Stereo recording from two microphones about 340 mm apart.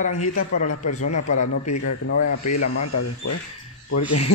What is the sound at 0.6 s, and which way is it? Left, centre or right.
Speech, left.